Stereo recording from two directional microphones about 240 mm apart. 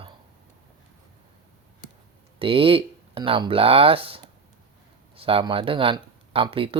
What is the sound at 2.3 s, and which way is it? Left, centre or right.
Speech, right.